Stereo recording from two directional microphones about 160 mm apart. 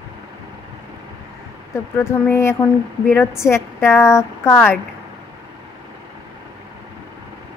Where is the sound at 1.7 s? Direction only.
15° left (ahead or behind).